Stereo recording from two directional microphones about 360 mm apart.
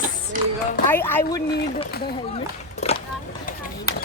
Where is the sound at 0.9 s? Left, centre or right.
Centre.